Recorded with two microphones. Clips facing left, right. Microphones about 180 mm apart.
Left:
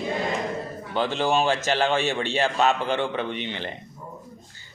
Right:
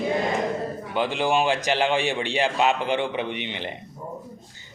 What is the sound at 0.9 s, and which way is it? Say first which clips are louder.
Speech: even; 15° right (ahead or behind).